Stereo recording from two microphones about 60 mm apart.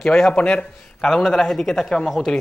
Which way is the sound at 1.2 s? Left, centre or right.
Centre.